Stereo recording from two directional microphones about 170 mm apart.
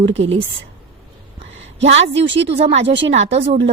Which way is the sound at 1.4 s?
40° right (ahead or behind).